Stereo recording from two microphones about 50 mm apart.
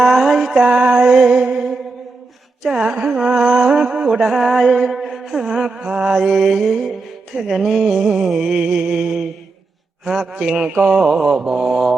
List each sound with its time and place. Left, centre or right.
0.0 s music: centre
0.6 s music: right
2.6 s a sound: centre